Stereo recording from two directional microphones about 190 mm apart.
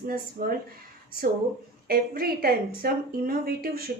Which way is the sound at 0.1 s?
50° right (ahead or behind).